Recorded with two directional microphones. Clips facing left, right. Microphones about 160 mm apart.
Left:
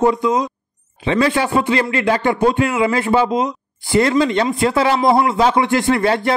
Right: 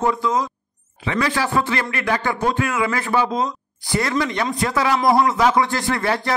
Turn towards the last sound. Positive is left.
turn(degrees=25)  # may be behind; listen again after turning